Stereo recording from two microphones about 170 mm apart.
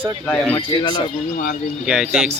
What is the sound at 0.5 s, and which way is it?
Speech, 25° left (ahead or behind).